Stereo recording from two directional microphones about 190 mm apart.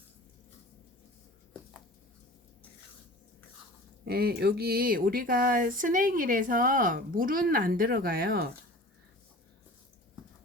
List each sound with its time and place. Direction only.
4.0 s speech: 55° right (ahead or behind)